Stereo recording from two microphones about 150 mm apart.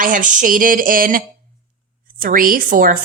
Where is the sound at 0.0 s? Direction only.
60° right (ahead or behind).